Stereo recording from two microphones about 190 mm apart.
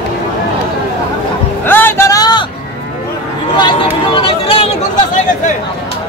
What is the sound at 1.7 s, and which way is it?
Boat, 10° left (ahead or behind).